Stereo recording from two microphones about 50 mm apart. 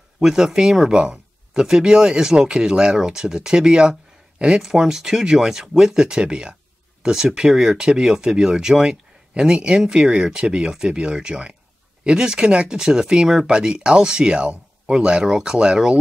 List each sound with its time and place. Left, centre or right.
0.2 s speech: centre